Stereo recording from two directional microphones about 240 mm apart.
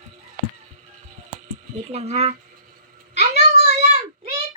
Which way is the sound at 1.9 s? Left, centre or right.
Right.